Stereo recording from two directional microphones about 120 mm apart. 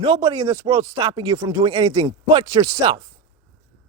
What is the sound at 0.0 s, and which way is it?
Speech, 40° right (ahead or behind).